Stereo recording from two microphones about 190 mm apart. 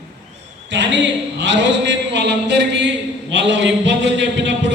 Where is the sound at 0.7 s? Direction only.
70° right (ahead or behind).